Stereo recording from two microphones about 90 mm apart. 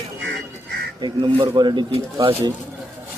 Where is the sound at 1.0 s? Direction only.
60° right (ahead or behind).